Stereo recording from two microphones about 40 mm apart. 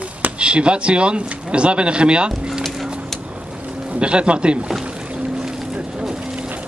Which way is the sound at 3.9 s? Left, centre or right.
Right.